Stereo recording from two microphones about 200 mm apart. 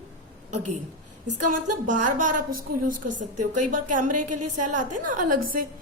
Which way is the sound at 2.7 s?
40° right (ahead or behind).